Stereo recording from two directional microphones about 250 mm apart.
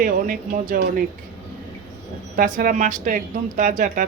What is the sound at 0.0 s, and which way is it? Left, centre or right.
Speech, right.